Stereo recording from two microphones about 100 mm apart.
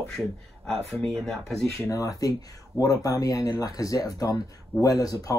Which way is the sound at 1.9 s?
35° left (ahead or behind).